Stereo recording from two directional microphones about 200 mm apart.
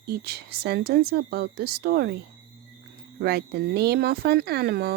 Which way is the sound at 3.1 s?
50° right (ahead or behind).